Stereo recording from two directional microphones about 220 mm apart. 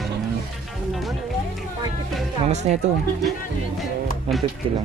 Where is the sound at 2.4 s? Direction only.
30° right (ahead or behind).